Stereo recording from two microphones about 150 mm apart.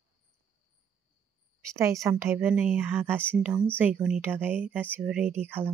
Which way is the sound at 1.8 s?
20° right (ahead or behind).